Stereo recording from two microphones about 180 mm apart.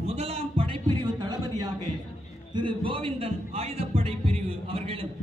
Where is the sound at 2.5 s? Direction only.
30° right (ahead or behind).